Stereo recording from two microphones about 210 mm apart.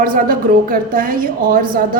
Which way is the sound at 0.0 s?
40° right (ahead or behind).